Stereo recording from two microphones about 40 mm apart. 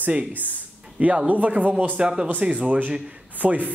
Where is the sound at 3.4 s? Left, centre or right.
Right.